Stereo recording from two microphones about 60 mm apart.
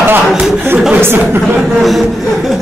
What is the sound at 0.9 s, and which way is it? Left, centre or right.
Speech, right.